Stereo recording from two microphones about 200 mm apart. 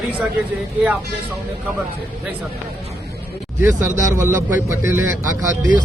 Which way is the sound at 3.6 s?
15° right (ahead or behind).